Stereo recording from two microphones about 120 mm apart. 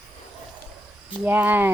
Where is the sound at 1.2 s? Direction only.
15° right (ahead or behind).